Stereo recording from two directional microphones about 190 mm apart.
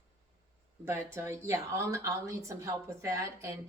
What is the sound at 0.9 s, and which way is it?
A woman's voice, 15° right (ahead or behind).